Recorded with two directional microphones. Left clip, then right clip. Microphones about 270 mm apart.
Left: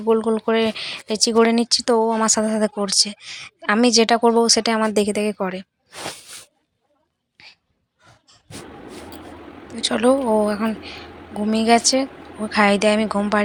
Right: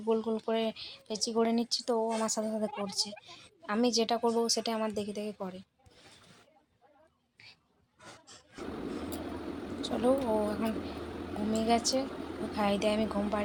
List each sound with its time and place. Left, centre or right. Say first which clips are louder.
0.0 s speech: left 13 dB; left
7.3 s a sound: left 10 dB; centre
9.8 s speech: left 12 dB; left